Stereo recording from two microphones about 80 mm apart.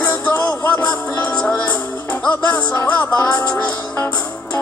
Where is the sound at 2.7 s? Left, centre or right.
Left.